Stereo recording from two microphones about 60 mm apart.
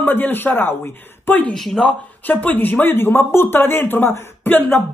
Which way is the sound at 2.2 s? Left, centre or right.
Left.